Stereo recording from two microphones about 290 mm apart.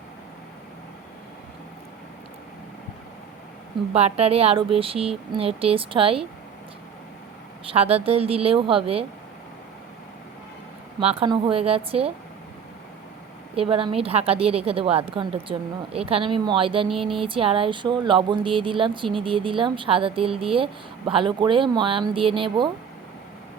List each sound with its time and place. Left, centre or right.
3.9 s a woman's voice: right
7.7 s a woman's voice: centre
11.0 s a woman's voice: centre
13.6 s a woman's voice: centre